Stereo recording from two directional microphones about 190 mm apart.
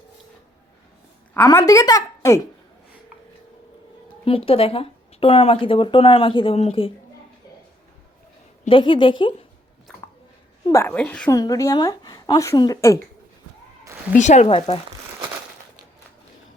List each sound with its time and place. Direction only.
1.5 s speech: 20° left (ahead or behind)
4.3 s speech: 30° left (ahead or behind)
8.6 s speech: 25° left (ahead or behind)
10.7 s a woman's voice: 10° left (ahead or behind)
11.3 s speech: 20° left (ahead or behind)
14.2 s speech: 35° left (ahead or behind)